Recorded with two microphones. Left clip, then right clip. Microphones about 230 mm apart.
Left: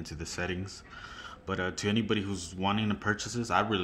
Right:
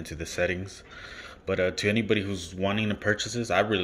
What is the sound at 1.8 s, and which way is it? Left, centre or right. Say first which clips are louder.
Speech: right 5 dB; left.